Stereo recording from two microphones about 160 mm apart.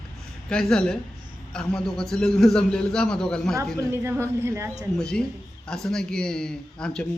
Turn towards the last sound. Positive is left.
turn(degrees=5)  # may be behind; listen again after turning